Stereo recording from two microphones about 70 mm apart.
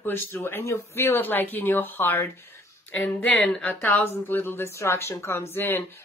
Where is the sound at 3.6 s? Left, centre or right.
Left.